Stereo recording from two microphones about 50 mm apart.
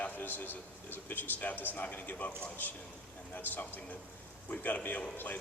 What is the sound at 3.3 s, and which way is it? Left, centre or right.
A man's voice, left.